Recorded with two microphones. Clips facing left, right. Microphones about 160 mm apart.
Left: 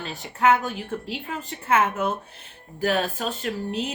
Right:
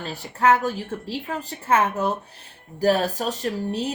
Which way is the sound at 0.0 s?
35° right (ahead or behind).